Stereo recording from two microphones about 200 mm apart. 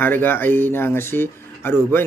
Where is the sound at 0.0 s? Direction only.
10° left (ahead or behind).